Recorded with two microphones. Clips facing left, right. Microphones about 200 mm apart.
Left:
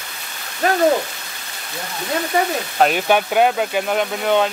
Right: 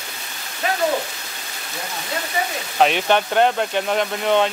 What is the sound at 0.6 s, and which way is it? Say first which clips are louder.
Hoot: left 5 dB; 45° left (ahead or behind).